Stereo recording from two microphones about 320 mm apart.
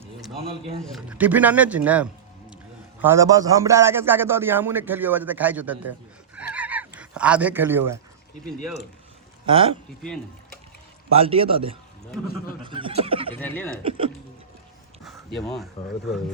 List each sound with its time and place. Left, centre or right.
0.3 s a man's voice: centre
0.9 s a man's voice: centre
6.3 s neigh: centre
9.5 s a man's voice: centre
10.0 s speech: centre
11.1 s a man's voice: centre
13.1 s a sound: centre
13.4 s speech: centre
13.8 s a man's voice: centre
15.0 s a sound: centre